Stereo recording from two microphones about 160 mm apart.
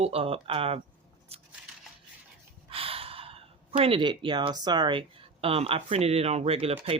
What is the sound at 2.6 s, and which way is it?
Speech, 35° right (ahead or behind).